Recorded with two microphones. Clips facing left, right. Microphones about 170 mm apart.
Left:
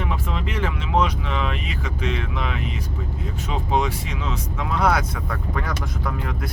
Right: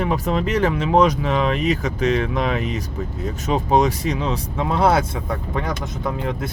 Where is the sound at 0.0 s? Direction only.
40° right (ahead or behind).